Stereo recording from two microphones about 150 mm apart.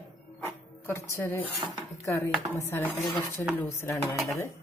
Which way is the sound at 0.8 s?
20° left (ahead or behind).